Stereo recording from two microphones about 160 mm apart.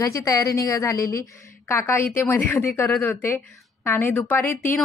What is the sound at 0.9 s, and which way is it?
Speech, 65° left (ahead or behind).